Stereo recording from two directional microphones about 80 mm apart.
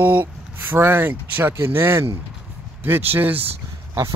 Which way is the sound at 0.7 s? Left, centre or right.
Right.